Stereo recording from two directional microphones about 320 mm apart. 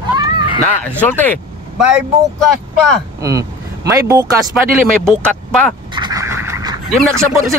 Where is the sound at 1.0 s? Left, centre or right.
Centre.